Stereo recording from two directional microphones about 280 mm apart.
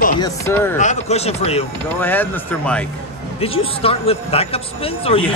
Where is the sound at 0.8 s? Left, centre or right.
Left.